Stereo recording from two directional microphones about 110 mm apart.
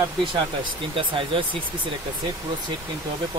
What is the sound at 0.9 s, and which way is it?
Speech, 50° right (ahead or behind).